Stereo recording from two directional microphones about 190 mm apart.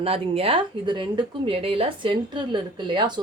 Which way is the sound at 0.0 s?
30° right (ahead or behind).